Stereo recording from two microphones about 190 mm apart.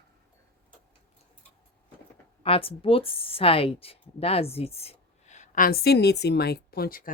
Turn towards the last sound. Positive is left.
turn(degrees=50)  # may be behind; listen again after turning